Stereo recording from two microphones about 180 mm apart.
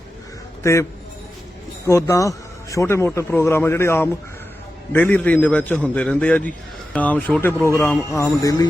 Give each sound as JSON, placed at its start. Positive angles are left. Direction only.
{"t": 0.6, "sound": "a man's voice", "side_deg": 15}
{"t": 8.1, "sound": "music", "side_deg": 15}